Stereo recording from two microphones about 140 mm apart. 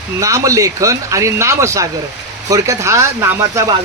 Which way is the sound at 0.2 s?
25° right (ahead or behind).